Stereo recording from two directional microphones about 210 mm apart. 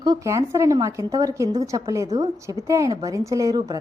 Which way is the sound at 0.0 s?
15° right (ahead or behind).